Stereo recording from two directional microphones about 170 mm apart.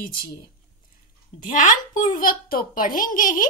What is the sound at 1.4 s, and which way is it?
A child's voice, 50° left (ahead or behind).